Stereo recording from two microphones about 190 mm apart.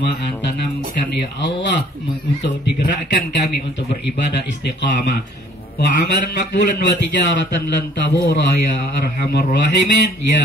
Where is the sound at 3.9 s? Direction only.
65° left (ahead or behind).